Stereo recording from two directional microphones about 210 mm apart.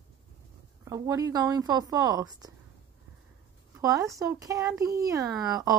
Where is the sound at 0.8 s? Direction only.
15° right (ahead or behind).